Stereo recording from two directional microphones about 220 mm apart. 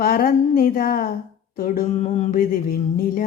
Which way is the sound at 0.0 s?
40° left (ahead or behind).